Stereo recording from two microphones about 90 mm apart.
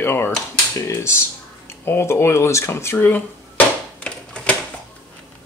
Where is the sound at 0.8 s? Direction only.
35° left (ahead or behind).